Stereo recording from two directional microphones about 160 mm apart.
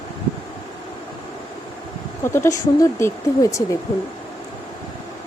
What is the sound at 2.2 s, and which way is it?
Speech, 15° left (ahead or behind).